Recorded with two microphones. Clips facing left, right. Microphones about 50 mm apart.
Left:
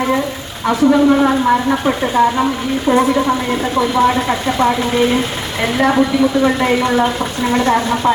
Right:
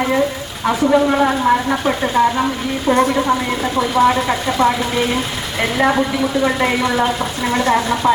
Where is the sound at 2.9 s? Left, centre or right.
Centre.